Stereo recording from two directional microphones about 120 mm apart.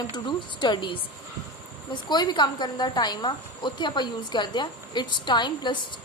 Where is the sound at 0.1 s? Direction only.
40° left (ahead or behind).